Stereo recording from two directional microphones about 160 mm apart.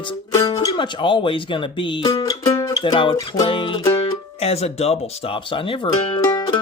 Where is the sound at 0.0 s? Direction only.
30° left (ahead or behind).